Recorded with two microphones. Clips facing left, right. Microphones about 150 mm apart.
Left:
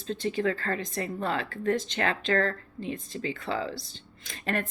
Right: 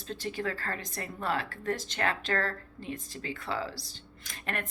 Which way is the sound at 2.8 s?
25° left (ahead or behind).